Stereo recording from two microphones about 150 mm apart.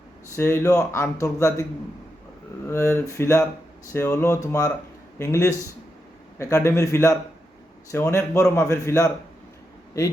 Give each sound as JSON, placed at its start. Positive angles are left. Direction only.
{"t": 0.3, "sound": "speech", "side_deg": 20}
{"t": 2.6, "sound": "speech", "side_deg": 15}